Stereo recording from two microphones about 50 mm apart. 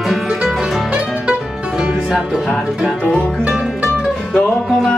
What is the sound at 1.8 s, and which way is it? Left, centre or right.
Music, centre.